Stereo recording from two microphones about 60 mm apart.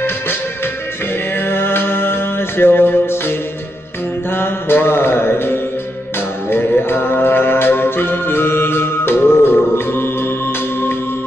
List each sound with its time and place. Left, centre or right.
1.4 s music: left
4.4 s mantra: left
6.5 s music: left